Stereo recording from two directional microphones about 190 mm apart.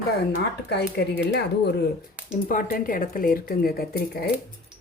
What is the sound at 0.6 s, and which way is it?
Speech, 65° left (ahead or behind).